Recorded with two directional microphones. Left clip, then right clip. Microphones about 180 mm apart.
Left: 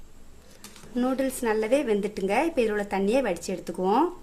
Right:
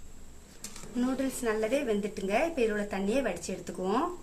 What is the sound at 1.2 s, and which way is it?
A woman's voice, 70° left (ahead or behind).